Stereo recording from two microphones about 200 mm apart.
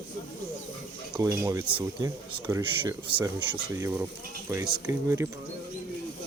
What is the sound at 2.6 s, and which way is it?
Speech, 25° right (ahead or behind).